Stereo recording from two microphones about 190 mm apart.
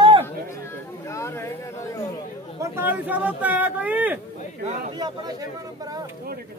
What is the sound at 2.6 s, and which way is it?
Speech, 10° right (ahead or behind).